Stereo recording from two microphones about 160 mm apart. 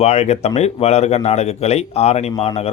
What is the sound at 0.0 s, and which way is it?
Speech, 40° left (ahead or behind).